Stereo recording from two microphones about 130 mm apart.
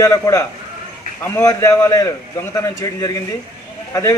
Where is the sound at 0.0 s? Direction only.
25° left (ahead or behind).